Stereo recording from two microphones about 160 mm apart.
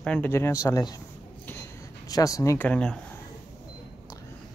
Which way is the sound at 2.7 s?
5° left (ahead or behind).